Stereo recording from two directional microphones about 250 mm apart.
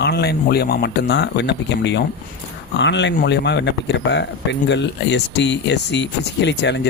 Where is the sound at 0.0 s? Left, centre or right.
Left.